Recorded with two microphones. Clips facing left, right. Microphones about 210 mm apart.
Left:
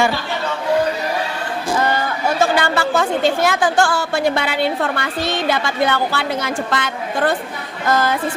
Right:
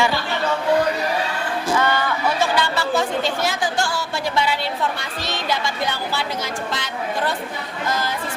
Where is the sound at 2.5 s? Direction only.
50° left (ahead or behind).